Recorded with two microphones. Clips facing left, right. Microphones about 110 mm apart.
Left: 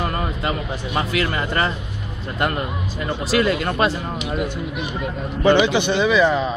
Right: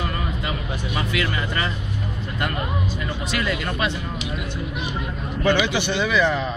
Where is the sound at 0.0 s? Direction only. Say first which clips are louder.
Left 4 dB; 40° left (ahead or behind).